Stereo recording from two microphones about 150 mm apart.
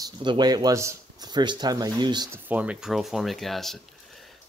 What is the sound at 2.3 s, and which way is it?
Speech, 10° right (ahead or behind).